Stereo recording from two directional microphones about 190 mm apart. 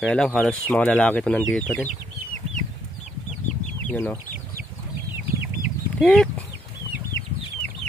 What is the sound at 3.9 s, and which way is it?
Speech, 10° left (ahead or behind).